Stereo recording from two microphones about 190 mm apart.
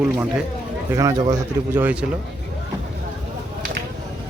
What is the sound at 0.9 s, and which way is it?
Speech, 20° right (ahead or behind).